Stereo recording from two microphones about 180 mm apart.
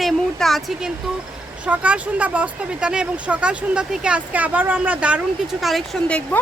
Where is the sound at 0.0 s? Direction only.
Centre (ahead or behind).